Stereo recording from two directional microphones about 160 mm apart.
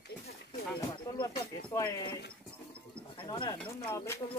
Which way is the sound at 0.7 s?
25° left (ahead or behind).